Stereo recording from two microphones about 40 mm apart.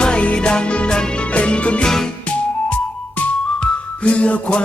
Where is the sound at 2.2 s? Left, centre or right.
Left.